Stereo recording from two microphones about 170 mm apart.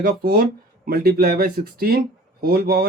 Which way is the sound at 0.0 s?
65° right (ahead or behind).